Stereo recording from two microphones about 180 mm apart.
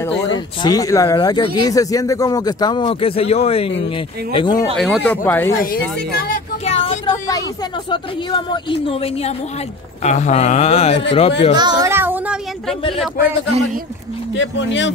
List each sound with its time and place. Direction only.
0.6 s speech: 20° left (ahead or behind)
4.7 s speech: centre (ahead or behind)
5.6 s speech: 55° left (ahead or behind)
6.6 s a sound: 35° left (ahead or behind)
7.9 s speech: 25° left (ahead or behind)
11.5 s speech: 20° right (ahead or behind)
14.3 s speech: 90° left